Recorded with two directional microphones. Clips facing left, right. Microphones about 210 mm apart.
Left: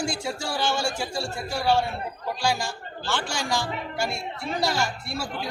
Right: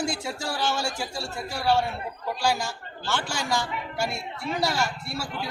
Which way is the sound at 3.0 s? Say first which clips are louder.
Even; 5° right (ahead or behind).